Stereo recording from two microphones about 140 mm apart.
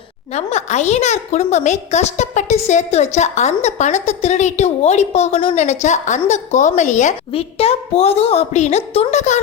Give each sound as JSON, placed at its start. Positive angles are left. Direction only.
{"t": 0.3, "sound": "a woman's voice", "side_deg": 50}
{"t": 5.5, "sound": "a woman's voice", "side_deg": 55}